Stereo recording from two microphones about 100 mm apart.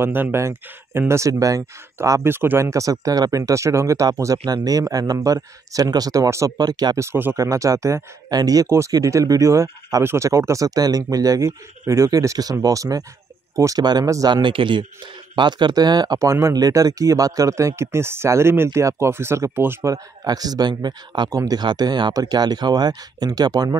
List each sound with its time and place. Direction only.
0.0 s speech: 20° right (ahead or behind)
6.6 s speech: 45° right (ahead or behind)
7.0 s speech: 25° right (ahead or behind)
14.3 s a man's voice: 55° right (ahead or behind); by 19.9 s 25° right (ahead or behind)
19.9 s speech: 40° right (ahead or behind)